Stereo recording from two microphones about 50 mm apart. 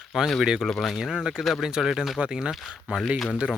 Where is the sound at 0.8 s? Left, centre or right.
Centre.